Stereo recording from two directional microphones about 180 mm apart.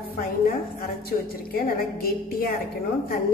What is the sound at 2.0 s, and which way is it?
Speech, 55° left (ahead or behind).